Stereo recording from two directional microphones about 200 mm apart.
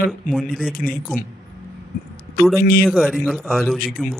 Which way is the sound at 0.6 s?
45° left (ahead or behind).